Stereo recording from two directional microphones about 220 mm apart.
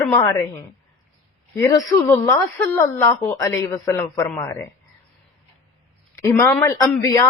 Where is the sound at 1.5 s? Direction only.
15° left (ahead or behind).